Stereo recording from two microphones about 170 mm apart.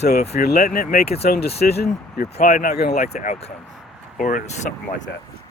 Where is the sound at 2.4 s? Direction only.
55° left (ahead or behind).